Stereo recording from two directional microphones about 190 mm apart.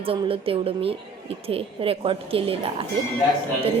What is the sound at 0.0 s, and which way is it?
A woman's voice, 30° right (ahead or behind).